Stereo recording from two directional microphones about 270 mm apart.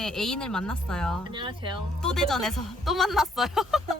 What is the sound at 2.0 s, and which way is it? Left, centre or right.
Speech, centre.